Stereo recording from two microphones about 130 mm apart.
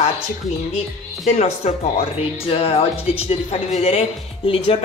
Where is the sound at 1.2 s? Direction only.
55° left (ahead or behind).